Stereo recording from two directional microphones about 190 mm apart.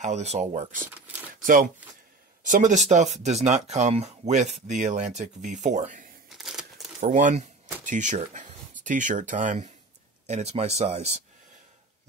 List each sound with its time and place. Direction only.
0.0 s speech: 35° right (ahead or behind)
6.2 s a sound: centre (ahead or behind)
7.0 s speech: 40° right (ahead or behind)